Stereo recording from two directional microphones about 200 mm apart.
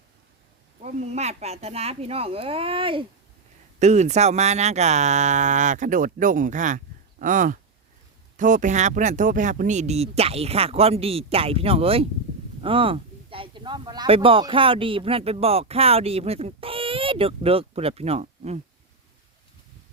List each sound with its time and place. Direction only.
0.8 s speech: 35° right (ahead or behind)